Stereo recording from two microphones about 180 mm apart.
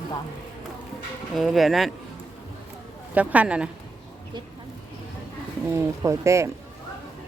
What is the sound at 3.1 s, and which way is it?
Speech, 10° right (ahead or behind).